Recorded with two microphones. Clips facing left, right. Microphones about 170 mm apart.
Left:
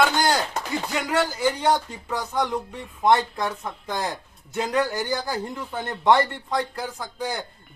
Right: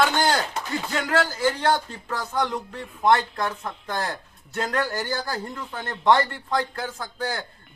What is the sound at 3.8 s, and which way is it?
Speech, 15° left (ahead or behind).